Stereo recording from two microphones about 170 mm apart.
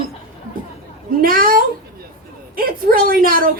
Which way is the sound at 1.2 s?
55° right (ahead or behind).